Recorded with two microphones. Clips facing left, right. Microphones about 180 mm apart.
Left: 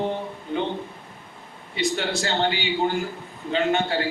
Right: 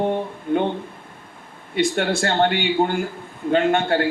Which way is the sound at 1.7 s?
55° right (ahead or behind).